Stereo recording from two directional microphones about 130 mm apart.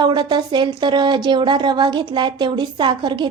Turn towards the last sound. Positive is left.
turn(degrees=-35)  # may be behind; listen again after turning